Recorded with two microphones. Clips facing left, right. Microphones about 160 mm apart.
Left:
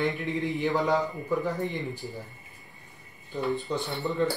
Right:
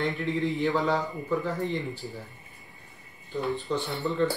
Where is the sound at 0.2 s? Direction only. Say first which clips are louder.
Right 2 dB; 20° left (ahead or behind).